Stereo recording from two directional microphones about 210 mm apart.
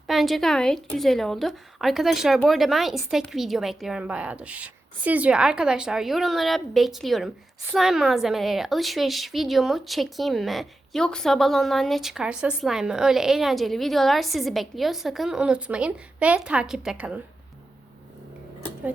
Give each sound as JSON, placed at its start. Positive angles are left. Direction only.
{"t": 0.1, "sound": "a woman's voice", "side_deg": 0}